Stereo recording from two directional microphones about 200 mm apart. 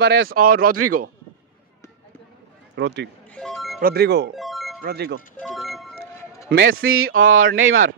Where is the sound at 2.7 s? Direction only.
60° right (ahead or behind).